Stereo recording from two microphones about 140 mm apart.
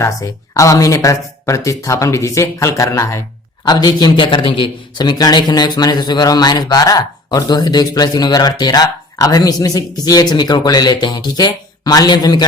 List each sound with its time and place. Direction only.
0.0 s a man's voice: 25° left (ahead or behind)